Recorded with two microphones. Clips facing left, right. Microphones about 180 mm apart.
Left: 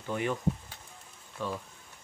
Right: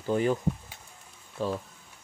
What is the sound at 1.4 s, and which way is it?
Speech, 30° right (ahead or behind).